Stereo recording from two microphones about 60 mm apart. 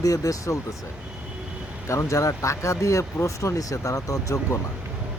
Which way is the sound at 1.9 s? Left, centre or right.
Left.